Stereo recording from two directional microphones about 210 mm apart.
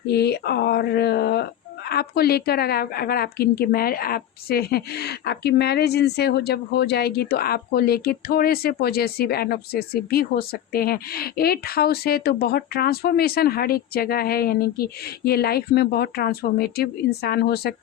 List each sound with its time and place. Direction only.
0.1 s a woman's voice: 50° left (ahead or behind)